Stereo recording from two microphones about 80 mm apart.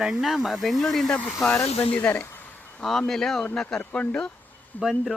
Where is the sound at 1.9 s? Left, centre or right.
Centre.